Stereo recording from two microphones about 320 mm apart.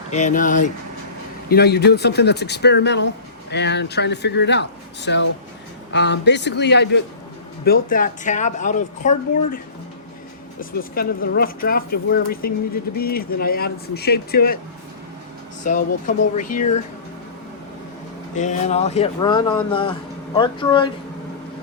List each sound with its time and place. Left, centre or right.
0.1 s speech: left
10.6 s speech: left
15.6 s speech: left
18.3 s speech: left